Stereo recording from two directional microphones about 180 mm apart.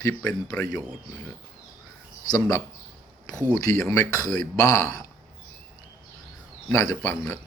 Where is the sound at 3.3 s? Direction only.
10° right (ahead or behind).